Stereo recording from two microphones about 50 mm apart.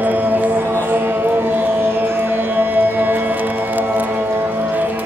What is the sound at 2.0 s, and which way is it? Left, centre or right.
Music, right.